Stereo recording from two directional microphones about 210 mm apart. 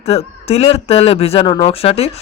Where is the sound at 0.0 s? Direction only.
30° left (ahead or behind).